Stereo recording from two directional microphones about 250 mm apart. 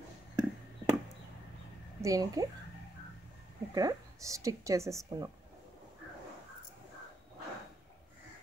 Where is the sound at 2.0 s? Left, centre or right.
Centre.